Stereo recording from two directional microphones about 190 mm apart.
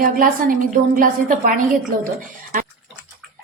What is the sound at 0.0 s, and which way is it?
A woman's voice, 45° right (ahead or behind).